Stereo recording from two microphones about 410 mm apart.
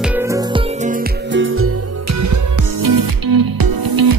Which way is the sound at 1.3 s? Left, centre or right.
Right.